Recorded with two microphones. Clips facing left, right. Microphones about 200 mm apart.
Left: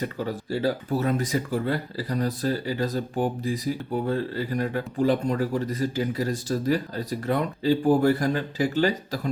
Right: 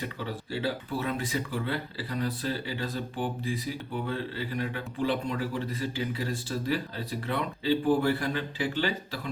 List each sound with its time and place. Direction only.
0.0 s speech: 40° left (ahead or behind)